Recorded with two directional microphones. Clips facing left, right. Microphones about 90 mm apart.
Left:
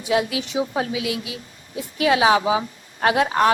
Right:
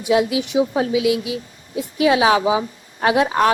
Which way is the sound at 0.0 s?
20° right (ahead or behind).